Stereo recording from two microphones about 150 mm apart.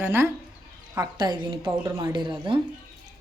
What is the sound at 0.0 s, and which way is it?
Speech, 15° right (ahead or behind).